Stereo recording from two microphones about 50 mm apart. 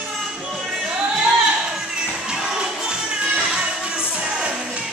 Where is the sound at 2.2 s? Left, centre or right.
Centre.